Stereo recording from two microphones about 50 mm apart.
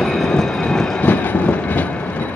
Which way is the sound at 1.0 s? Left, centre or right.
Left.